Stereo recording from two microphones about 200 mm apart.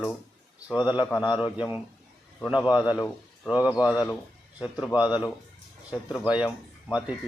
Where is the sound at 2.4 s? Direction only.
5° right (ahead or behind).